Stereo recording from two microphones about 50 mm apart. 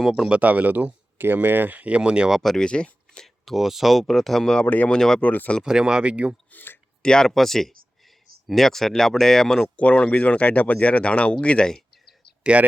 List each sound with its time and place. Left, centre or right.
0.1 s speech: centre
0.4 s speech: right
2.0 s speech: centre
2.3 s speech: centre
2.6 s speech: centre
3.2 s speech: centre
4.6 s speech: left
4.9 s speech: centre
5.2 s speech: left
5.6 s speech: centre
6.5 s speech: left
7.0 s speech: centre
9.7 s speech: left
12.4 s speech: right